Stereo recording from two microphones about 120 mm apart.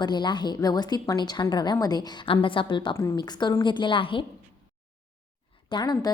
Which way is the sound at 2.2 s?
45° left (ahead or behind).